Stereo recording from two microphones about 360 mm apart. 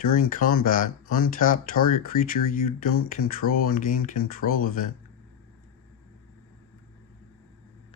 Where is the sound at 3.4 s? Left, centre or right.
Left.